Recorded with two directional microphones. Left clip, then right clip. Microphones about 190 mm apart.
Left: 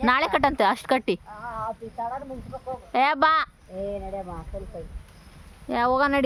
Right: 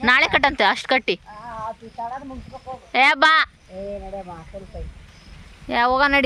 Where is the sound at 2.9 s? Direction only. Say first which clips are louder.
Right 5 dB; 5° left (ahead or behind).